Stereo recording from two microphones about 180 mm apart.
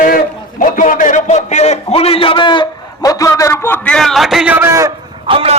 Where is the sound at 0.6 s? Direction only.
45° left (ahead or behind); by 4.9 s 15° right (ahead or behind).